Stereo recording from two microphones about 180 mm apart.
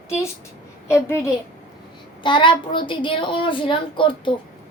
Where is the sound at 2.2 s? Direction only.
25° left (ahead or behind).